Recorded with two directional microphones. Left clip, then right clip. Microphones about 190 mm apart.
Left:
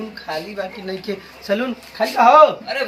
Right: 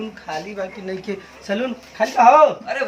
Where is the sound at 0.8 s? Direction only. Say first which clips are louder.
Left 1 dB; 15° right (ahead or behind).